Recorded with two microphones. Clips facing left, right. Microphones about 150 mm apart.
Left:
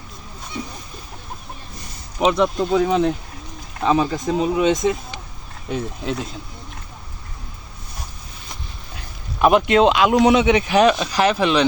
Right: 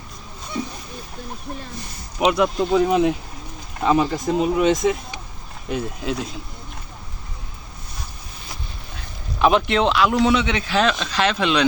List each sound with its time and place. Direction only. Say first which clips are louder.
2.1 s speech: left 1 dB; 5° right (ahead or behind)
9.4 s speech: left 2 dB; 5° left (ahead or behind)
9.8 s speech: left 3 dB; 20° left (ahead or behind); by 11.6 s 5° left (ahead or behind)